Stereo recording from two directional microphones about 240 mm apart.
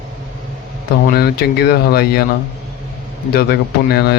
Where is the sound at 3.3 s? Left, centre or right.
Left.